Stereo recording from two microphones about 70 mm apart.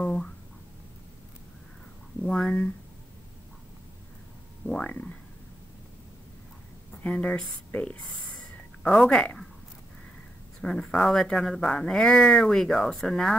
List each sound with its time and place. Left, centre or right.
0.0 s a sound: centre
2.2 s speech: centre
4.6 s speech: centre
7.0 s speech: centre
10.6 s speech: centre